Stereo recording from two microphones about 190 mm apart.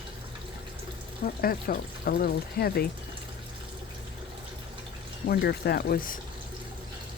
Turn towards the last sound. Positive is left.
turn(degrees=55)  # may be behind; listen again after turning